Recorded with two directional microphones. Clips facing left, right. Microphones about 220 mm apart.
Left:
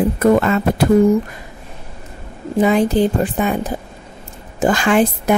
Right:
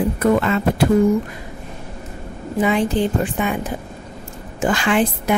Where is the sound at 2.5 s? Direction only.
40° left (ahead or behind).